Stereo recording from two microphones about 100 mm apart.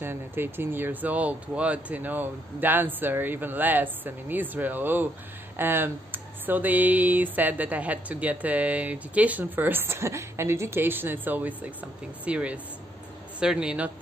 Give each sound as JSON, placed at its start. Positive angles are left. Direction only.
{"t": 0.0, "sound": "speech", "side_deg": -20}